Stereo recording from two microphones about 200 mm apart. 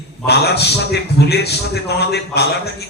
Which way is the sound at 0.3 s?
55° left (ahead or behind).